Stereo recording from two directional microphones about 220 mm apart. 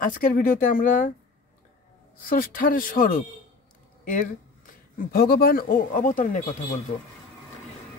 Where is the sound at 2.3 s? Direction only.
40° left (ahead or behind).